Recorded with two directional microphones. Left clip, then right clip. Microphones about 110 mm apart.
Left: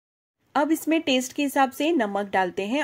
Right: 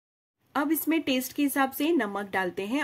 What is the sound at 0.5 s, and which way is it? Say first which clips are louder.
Speech: left 5 dB; 30° left (ahead or behind).